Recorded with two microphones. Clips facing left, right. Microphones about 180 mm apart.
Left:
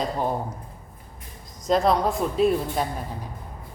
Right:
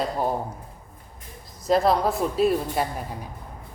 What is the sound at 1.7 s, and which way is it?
A woman's voice, 5° right (ahead or behind).